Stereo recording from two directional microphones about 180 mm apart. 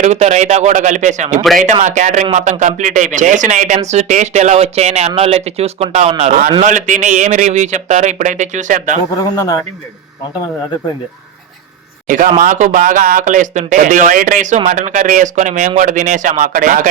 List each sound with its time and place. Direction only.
0.0 s speech: 40° right (ahead or behind)
9.3 s a man's voice: 20° left (ahead or behind)
12.0 s speech: 45° right (ahead or behind)